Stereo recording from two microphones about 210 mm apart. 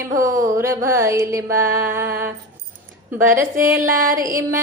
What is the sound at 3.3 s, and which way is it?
Music, 10° right (ahead or behind).